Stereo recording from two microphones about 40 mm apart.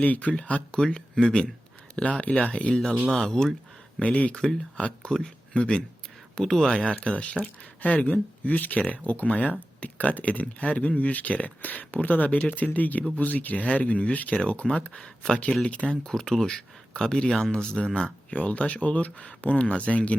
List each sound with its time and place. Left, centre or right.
0.0 s speech: left
0.8 s speech: left
3.1 s speech: centre
4.0 s speech: left
6.5 s speech: centre
6.7 s speech: left
7.8 s speech: left
15.0 s speech: centre